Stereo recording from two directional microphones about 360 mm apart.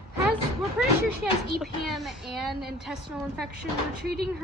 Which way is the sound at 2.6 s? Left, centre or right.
Right.